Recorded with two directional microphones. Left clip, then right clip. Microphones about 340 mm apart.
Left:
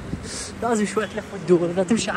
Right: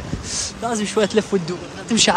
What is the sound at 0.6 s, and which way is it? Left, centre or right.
Speech, centre.